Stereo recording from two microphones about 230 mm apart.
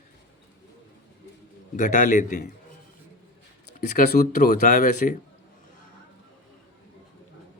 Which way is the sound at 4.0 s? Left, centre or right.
Left.